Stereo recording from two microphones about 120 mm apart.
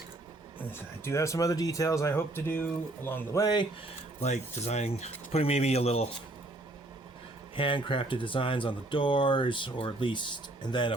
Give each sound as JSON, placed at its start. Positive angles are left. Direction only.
{"t": 0.7, "sound": "speech", "side_deg": 20}
{"t": 3.4, "sound": "speech", "side_deg": 40}
{"t": 4.2, "sound": "speech", "side_deg": 65}
{"t": 7.5, "sound": "speech", "side_deg": 45}